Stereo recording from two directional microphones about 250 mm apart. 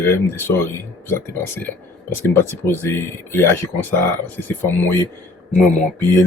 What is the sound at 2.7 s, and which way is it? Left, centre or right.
Speech, centre.